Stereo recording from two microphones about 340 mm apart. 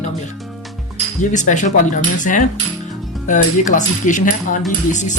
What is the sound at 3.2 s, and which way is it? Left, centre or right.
Speech, left.